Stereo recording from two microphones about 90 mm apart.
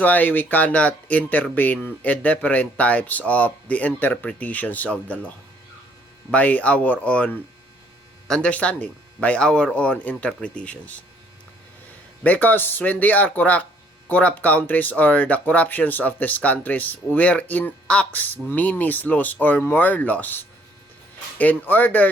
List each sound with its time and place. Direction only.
0.0 s speech: 20° left (ahead or behind)
6.3 s speech: 15° left (ahead or behind)
12.2 s speech: 20° left (ahead or behind)